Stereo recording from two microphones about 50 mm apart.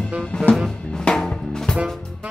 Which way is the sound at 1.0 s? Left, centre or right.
Centre.